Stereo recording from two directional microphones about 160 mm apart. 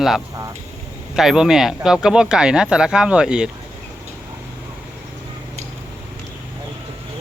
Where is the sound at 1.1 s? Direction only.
5° right (ahead or behind).